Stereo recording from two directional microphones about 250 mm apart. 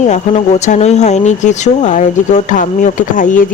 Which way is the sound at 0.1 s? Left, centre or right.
Left.